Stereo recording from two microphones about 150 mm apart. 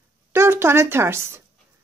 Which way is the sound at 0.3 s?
15° right (ahead or behind).